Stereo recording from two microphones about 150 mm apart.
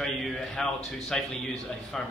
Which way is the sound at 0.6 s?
Centre (ahead or behind).